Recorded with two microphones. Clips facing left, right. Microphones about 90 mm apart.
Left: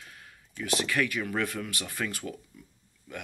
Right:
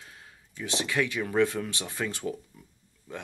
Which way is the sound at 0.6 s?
20° right (ahead or behind).